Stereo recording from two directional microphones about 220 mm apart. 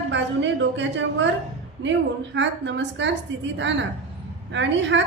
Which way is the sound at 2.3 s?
55° right (ahead or behind).